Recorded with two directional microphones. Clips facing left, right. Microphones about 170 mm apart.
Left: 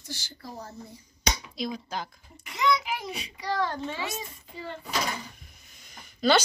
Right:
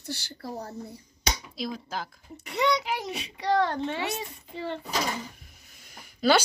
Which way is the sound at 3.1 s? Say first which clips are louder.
Right 6 dB; 65° right (ahead or behind).